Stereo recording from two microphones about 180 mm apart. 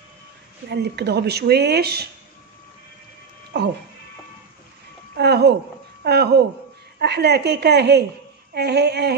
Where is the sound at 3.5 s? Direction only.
70° right (ahead or behind).